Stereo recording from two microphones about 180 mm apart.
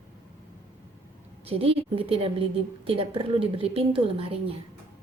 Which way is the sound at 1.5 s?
30° right (ahead or behind).